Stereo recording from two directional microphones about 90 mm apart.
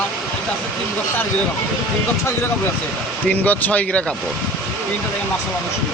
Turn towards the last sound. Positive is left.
turn(degrees=15)  # may be behind; listen again after turning